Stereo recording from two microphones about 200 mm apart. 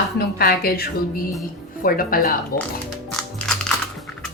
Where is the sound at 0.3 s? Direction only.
50° left (ahead or behind).